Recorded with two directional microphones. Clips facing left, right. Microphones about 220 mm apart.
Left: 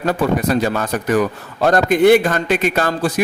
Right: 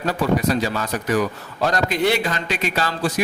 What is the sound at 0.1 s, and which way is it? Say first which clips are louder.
A man's voice: left 3 dB; 50° left (ahead or behind).